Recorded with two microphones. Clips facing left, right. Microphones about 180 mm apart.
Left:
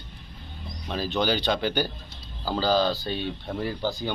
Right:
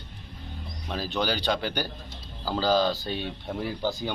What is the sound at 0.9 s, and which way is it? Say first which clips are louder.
Speech: left 3 dB; 5° right (ahead or behind).